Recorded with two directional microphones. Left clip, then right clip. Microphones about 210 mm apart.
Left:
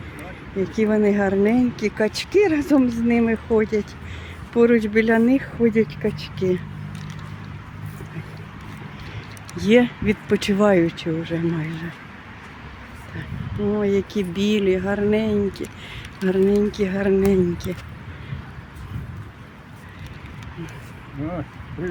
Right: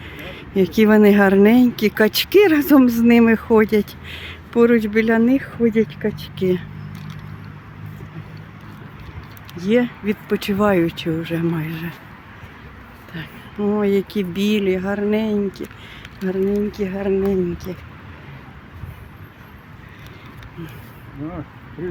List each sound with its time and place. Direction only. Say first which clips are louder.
0.5 s speech: right 6 dB; 45° right (ahead or behind)
4.5 s speech: right 1 dB; 20° right (ahead or behind)
9.6 s speech: left 2 dB; centre (ahead or behind); by 11.9 s 15° right (ahead or behind)
13.7 s speech: right 2 dB; 20° right (ahead or behind)
16.2 s speech: left 2 dB; centre (ahead or behind)